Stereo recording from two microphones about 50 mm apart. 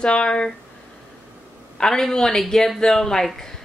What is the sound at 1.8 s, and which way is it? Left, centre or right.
A woman's voice, centre.